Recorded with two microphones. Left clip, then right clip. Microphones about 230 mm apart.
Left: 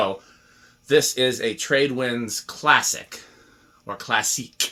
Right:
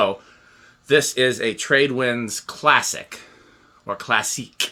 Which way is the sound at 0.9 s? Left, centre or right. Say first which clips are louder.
Right 2 dB; right.